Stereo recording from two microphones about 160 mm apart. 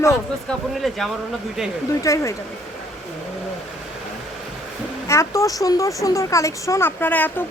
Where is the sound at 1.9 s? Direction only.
20° left (ahead or behind).